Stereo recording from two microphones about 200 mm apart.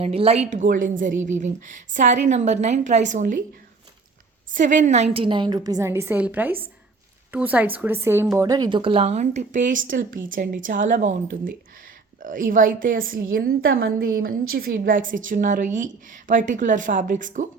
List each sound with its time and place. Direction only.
0.0 s a woman's voice: 30° right (ahead or behind)
4.5 s a woman's voice: 40° right (ahead or behind)